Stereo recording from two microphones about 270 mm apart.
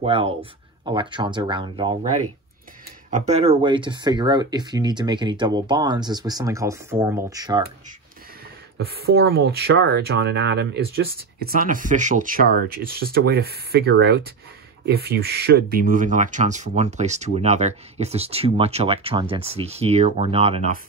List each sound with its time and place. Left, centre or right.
0.0 s speech: right
3.1 s speech: right
8.7 s speech: right